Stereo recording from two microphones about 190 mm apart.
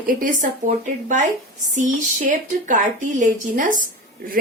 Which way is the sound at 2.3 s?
40° right (ahead or behind).